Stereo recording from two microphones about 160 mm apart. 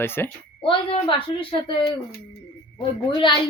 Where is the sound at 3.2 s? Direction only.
30° left (ahead or behind).